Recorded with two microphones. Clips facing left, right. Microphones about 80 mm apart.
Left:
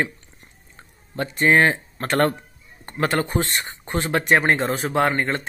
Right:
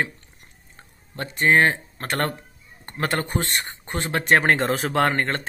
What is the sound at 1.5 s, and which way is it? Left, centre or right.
Speech, left.